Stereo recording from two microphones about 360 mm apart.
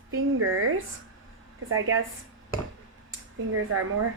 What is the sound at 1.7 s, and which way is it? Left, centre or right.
Speech, right.